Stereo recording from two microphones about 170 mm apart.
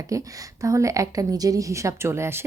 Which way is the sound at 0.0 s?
20° right (ahead or behind).